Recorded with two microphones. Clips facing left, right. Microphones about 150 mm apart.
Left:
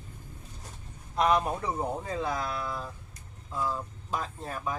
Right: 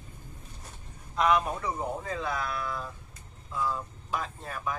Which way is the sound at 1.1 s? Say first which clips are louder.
Even; 35° left (ahead or behind).